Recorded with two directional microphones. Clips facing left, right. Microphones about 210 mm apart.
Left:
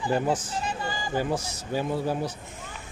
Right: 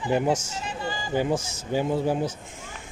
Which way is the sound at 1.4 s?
50° right (ahead or behind).